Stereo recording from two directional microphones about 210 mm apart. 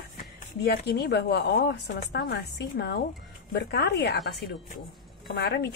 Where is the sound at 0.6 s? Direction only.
50° left (ahead or behind).